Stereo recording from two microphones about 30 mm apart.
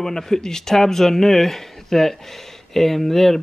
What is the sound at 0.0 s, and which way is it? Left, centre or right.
Speech, centre.